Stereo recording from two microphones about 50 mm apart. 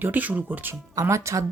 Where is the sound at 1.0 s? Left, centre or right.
Right.